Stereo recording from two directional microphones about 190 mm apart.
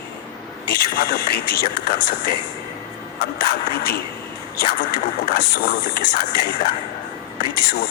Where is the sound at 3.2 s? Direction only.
55° left (ahead or behind).